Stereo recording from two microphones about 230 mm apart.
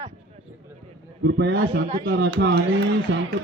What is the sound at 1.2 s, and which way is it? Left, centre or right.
Speech, right.